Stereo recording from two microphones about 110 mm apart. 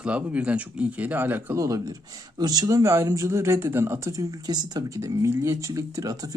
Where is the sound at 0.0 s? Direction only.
10° right (ahead or behind).